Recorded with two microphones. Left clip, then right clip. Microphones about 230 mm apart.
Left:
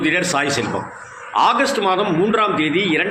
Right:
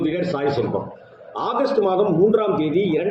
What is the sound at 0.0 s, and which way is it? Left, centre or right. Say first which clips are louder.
Speech: left 4 dB; centre.